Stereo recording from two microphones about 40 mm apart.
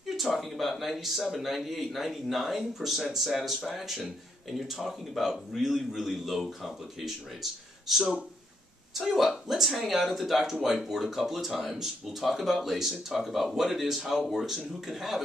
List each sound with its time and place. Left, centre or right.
0.0 s speech: centre
8.0 s speech: right
8.9 s speech: centre